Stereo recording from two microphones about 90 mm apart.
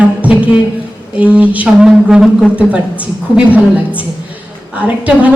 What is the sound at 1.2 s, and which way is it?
A woman's voice, 15° right (ahead or behind).